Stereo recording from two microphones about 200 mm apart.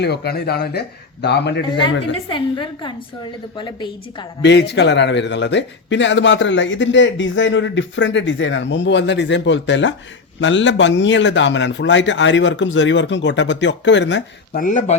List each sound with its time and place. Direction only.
0.0 s a man's voice: 55° left (ahead or behind)
2.3 s a woman's voice: 25° left (ahead or behind)
4.4 s a man's voice: 60° left (ahead or behind)
14.5 s speech: 40° left (ahead or behind)